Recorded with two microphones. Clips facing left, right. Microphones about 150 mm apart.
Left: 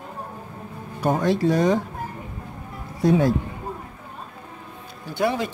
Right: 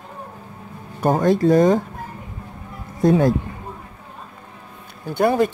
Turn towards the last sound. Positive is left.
turn(degrees=-50)  # may be behind; listen again after turning